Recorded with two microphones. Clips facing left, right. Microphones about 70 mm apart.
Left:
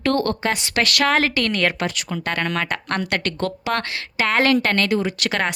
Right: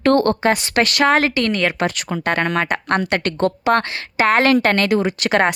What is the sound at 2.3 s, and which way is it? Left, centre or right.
A woman's voice, right.